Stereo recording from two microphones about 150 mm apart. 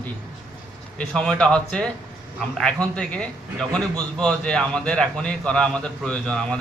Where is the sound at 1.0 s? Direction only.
5° left (ahead or behind).